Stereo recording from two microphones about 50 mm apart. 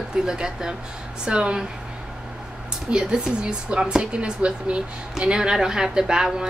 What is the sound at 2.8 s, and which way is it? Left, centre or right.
Speech, centre.